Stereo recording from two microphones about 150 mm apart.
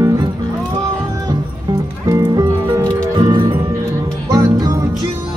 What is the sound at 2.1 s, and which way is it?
Music, 25° right (ahead or behind).